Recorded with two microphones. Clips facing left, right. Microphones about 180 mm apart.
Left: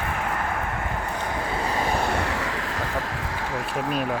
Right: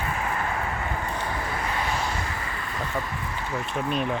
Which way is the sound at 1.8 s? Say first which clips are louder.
Left 5 dB; 50° left (ahead or behind).